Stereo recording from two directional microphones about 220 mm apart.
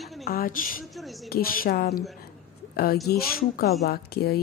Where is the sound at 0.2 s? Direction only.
40° left (ahead or behind).